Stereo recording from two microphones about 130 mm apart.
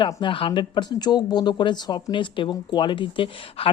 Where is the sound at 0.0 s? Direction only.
40° left (ahead or behind).